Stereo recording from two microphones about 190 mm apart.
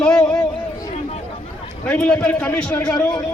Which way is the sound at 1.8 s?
5° left (ahead or behind).